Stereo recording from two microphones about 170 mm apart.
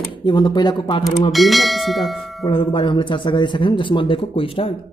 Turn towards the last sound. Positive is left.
turn(degrees=30)  # may be behind; listen again after turning